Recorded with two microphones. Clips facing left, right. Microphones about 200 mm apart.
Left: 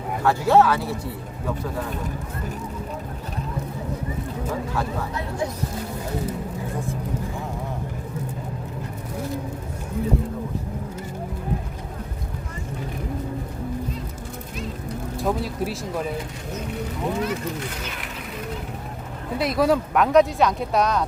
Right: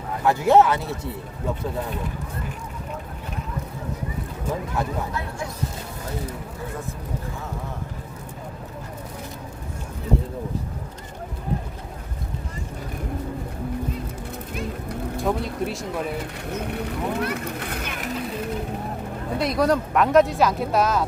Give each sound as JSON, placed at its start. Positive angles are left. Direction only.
{"t": 0.3, "sound": "speech", "side_deg": -20}
{"t": 15.2, "sound": "speech", "side_deg": 0}
{"t": 16.5, "sound": "speech", "side_deg": -60}
{"t": 19.4, "sound": "speech", "side_deg": 0}